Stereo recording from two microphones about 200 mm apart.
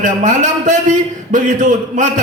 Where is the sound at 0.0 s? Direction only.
40° right (ahead or behind).